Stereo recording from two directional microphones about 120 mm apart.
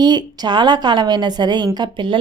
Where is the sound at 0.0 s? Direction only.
35° right (ahead or behind).